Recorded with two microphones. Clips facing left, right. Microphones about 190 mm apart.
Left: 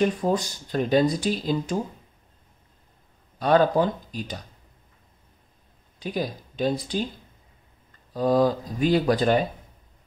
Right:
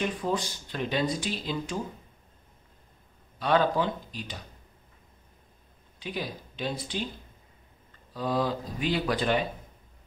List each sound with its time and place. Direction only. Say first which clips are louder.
0.0 s speech: left 6 dB; 40° left (ahead or behind)
3.3 s speech: left 5 dB; 45° left (ahead or behind)
5.9 s speech: left 6 dB; 40° left (ahead or behind)
8.1 s speech: left 8 dB; 45° left (ahead or behind)